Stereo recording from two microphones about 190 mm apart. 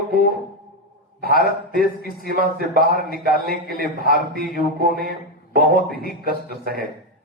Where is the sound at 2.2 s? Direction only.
50° right (ahead or behind).